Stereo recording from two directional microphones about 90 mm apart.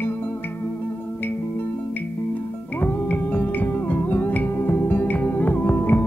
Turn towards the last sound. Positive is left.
turn(degrees=25)  # may be behind; listen again after turning